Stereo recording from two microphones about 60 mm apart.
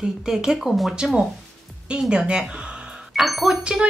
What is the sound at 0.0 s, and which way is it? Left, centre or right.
Speech, centre.